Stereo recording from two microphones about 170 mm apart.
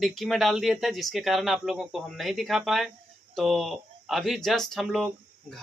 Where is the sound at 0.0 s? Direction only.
Centre (ahead or behind).